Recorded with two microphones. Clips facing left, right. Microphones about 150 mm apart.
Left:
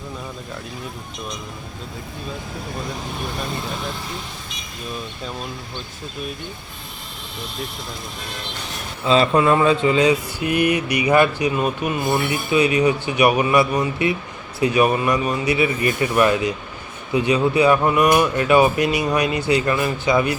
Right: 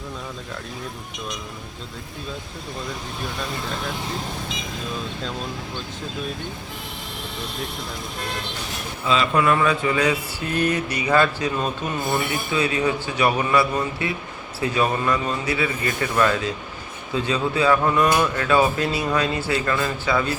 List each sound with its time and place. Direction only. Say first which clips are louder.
9.0 s speech: left 4 dB; 35° left (ahead or behind); by 20.3 s 15° left (ahead or behind)